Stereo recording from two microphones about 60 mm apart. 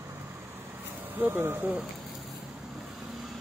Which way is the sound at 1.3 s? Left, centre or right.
Right.